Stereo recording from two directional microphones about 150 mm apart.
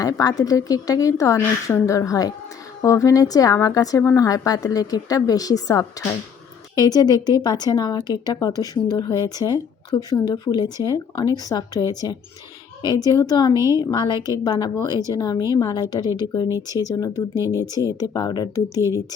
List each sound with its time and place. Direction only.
0.0 s a woman's voice: 25° left (ahead or behind)
13.5 s a woman's voice: 20° right (ahead or behind)
13.7 s a woman's voice: 25° left (ahead or behind)
17.3 s speech: 20° right (ahead or behind)
17.7 s a woman's voice: 25° left (ahead or behind)